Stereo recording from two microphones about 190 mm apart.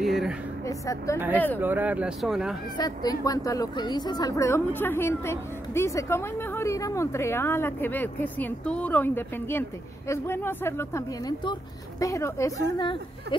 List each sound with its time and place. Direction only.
0.0 s a sound: centre (ahead or behind)
0.7 s a woman's voice: 15° left (ahead or behind)
1.6 s speech: 10° right (ahead or behind)
2.8 s a woman's voice: 20° left (ahead or behind)
12.7 s a woman's voice: 25° left (ahead or behind)